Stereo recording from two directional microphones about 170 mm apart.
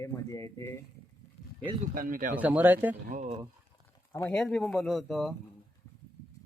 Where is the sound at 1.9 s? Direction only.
55° right (ahead or behind).